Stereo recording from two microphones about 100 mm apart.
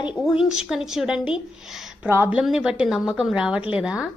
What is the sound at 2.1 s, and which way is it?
Speech, 20° right (ahead or behind).